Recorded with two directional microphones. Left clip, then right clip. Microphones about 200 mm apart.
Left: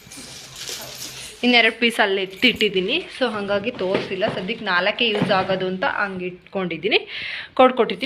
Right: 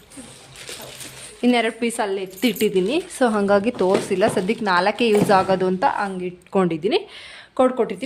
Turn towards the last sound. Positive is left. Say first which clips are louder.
# left 3 dB
turn(degrees=-10)  # may be behind; listen again after turning